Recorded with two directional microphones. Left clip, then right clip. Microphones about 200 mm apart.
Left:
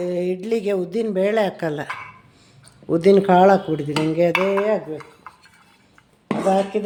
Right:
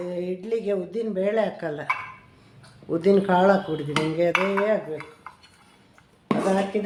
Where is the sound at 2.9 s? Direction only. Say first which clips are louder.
Left 6 dB; 40° left (ahead or behind).